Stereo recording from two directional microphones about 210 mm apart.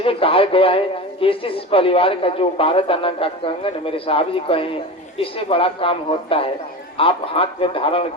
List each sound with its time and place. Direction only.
0.0 s a man's voice: 25° left (ahead or behind)